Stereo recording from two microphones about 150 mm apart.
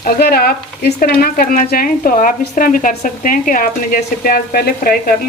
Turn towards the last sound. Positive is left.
turn(degrees=75)  # may be behind; listen again after turning